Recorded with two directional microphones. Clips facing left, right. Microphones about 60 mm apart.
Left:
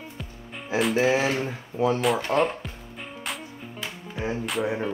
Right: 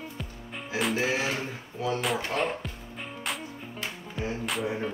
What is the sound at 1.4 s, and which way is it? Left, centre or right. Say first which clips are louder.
Speech: left 8 dB; left.